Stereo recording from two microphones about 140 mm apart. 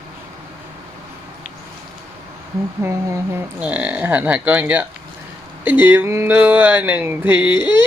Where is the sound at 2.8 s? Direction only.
20° right (ahead or behind).